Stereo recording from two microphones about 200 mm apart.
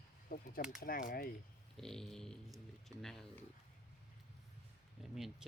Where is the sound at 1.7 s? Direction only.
5° left (ahead or behind).